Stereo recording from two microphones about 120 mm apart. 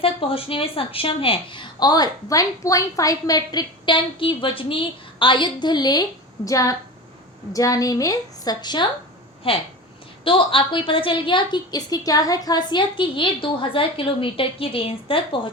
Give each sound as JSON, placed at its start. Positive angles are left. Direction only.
{"t": 0.0, "sound": "a woman's voice", "side_deg": 50}
{"t": 9.5, "sound": "a woman's voice", "side_deg": 50}